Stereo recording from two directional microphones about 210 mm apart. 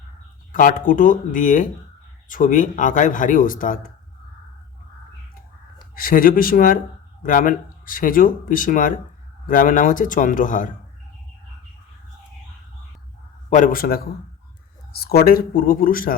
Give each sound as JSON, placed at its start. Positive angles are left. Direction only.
{"t": 0.5, "sound": "speech", "side_deg": 40}
{"t": 5.9, "sound": "speech", "side_deg": 40}
{"t": 13.5, "sound": "speech", "side_deg": 40}